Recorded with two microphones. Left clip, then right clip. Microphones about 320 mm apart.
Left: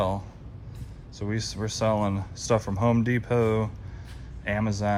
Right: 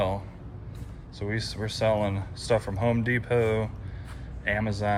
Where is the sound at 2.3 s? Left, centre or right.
Left.